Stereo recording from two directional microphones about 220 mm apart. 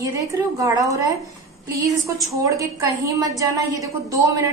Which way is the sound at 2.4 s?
15° right (ahead or behind).